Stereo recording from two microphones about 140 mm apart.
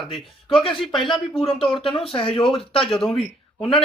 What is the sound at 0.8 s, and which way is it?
Speech, centre (ahead or behind).